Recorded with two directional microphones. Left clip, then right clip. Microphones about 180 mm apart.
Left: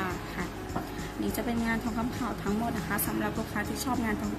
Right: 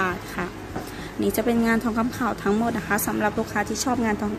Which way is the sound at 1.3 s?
55° right (ahead or behind).